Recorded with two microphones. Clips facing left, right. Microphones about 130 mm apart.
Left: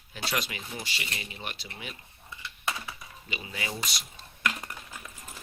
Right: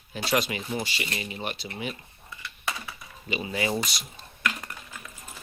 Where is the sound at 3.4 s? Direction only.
40° right (ahead or behind).